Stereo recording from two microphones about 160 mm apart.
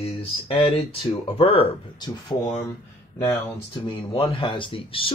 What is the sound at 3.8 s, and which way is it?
Speech, 35° left (ahead or behind).